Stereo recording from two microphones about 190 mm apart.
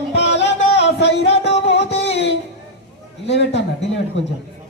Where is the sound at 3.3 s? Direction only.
65° left (ahead or behind).